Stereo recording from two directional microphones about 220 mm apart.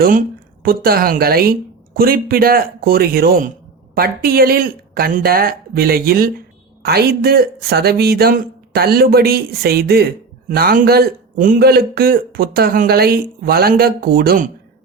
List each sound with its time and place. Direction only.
0.6 s speech: 40° right (ahead or behind)